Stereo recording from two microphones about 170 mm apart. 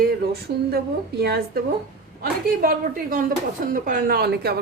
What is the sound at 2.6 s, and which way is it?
A woman's voice, 55° right (ahead or behind).